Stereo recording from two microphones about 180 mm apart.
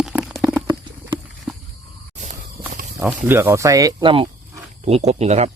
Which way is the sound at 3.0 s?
10° right (ahead or behind).